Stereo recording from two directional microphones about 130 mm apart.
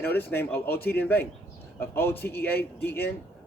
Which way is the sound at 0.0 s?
15° left (ahead or behind).